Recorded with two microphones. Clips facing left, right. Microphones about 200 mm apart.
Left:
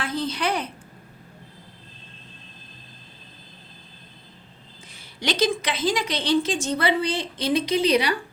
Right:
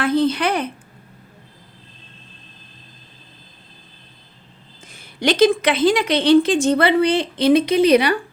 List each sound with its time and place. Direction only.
0.0 s a woman's voice: 60° right (ahead or behind)
4.9 s a woman's voice: 55° right (ahead or behind)